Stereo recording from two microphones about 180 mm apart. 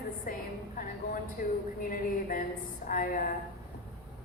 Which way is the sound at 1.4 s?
50° left (ahead or behind).